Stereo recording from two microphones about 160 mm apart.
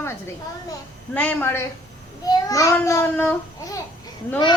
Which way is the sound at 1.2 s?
10° left (ahead or behind).